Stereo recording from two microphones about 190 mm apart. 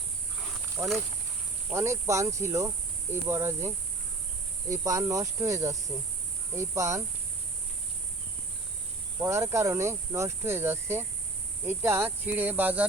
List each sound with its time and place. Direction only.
0.8 s speech: 10° right (ahead or behind)
4.7 s speech: 15° right (ahead or behind)
9.2 s speech: 15° right (ahead or behind)